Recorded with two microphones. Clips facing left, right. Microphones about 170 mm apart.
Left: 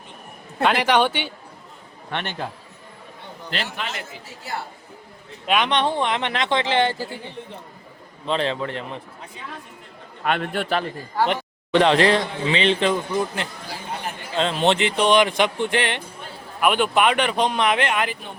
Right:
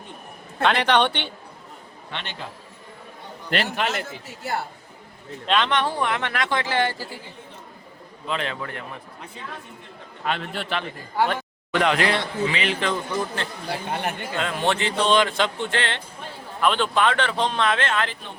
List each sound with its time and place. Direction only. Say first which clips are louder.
0.6 s speech: left 1 dB; 10° left (ahead or behind)
2.0 s a man's voice: left 6 dB; 55° left (ahead or behind)
3.5 s a man's voice: right 5 dB; 60° right (ahead or behind)
5.5 s speech: left 2 dB; 15° left (ahead or behind)
8.3 s speech: left 5 dB; 30° left (ahead or behind)
10.2 s a man's voice: left 5 dB; 55° left (ahead or behind)
11.3 s speech: left 5 dB; 25° left (ahead or behind)
12.9 s speech: left 3 dB; 15° left (ahead or behind)
13.9 s a man's voice: right 2 dB; 65° right (ahead or behind)
14.3 s speech: left 6 dB; 25° left (ahead or behind)